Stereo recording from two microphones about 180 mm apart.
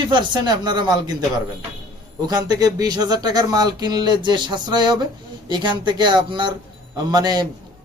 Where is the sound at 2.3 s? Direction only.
20° right (ahead or behind).